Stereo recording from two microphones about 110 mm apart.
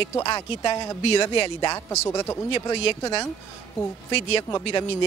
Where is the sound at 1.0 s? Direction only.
60° left (ahead or behind).